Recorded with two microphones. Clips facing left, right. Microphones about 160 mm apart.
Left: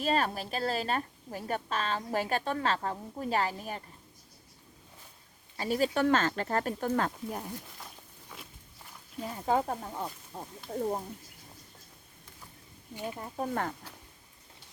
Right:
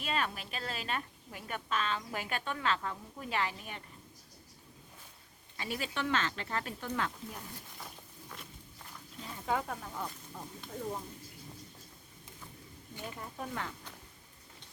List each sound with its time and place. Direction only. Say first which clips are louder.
0.0 s a woman's voice: left 6 dB; 40° left (ahead or behind)
5.5 s speech: left 9 dB; 40° left (ahead or behind)
8.3 s walk: left 1 dB; 5° left (ahead or behind)
9.5 s a woman's voice: left 5 dB; 35° left (ahead or behind)
13.1 s speech: left 7 dB; 40° left (ahead or behind)